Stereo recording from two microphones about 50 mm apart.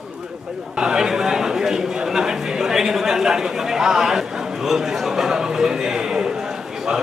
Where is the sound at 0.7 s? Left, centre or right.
Centre.